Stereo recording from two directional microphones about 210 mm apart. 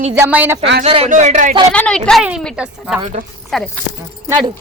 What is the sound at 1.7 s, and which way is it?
A woman's voice, 5° left (ahead or behind).